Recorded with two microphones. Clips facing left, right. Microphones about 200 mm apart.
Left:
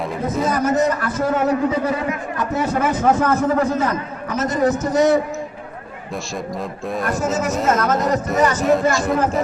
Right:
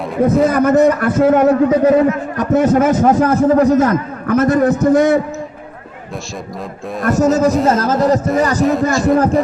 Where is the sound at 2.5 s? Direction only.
50° right (ahead or behind).